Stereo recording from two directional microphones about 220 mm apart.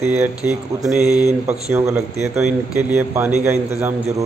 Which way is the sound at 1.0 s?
15° left (ahead or behind).